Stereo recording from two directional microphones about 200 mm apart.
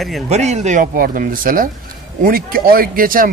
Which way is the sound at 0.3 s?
35° right (ahead or behind).